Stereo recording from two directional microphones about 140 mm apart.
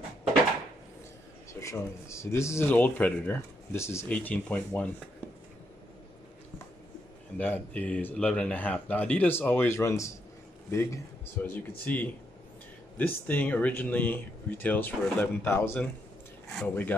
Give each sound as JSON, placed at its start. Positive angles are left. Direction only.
{"t": 1.5, "sound": "speech", "side_deg": 20}
{"t": 7.3, "sound": "speech", "side_deg": 10}